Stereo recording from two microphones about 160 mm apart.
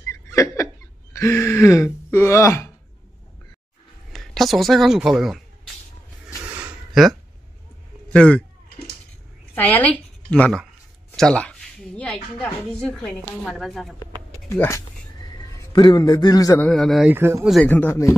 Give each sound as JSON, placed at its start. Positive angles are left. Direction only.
{"t": 0.1, "sound": "a sound", "side_deg": 20}
{"t": 1.1, "sound": "speech", "side_deg": 15}
{"t": 4.1, "sound": "speech", "side_deg": 0}
{"t": 6.4, "sound": "a sound", "side_deg": -10}
{"t": 8.1, "sound": "speech", "side_deg": 5}
{"t": 8.6, "sound": "a sound", "side_deg": 80}
{"t": 9.6, "sound": "a woman's voice", "side_deg": 10}
{"t": 14.5, "sound": "speech", "side_deg": 15}
{"t": 15.2, "sound": "a man's voice", "side_deg": 25}
{"t": 16.6, "sound": "a woman's voice", "side_deg": 0}
{"t": 17.1, "sound": "speech", "side_deg": -15}
{"t": 17.6, "sound": "speech", "side_deg": 10}